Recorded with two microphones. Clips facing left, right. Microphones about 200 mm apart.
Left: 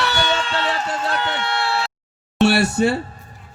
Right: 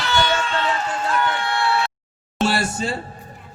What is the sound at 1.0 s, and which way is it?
Run, 70° left (ahead or behind).